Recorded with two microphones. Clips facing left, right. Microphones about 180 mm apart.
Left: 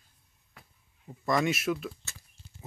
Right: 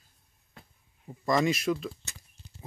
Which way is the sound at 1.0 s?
Centre (ahead or behind).